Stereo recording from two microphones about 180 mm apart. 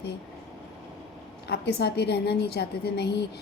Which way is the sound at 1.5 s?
65° left (ahead or behind).